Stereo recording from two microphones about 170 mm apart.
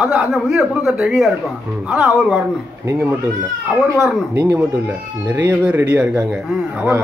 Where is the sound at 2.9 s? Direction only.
15° right (ahead or behind).